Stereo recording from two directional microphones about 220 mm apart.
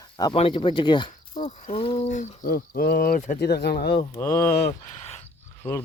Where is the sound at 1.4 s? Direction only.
35° left (ahead or behind).